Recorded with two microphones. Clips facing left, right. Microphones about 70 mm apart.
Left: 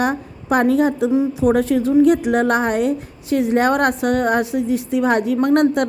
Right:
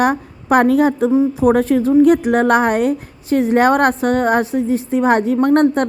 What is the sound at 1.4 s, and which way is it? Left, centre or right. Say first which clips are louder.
A woman's voice: right 3 dB; right.